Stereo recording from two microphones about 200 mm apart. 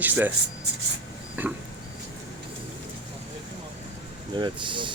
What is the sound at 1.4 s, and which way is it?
Speech, 10° right (ahead or behind).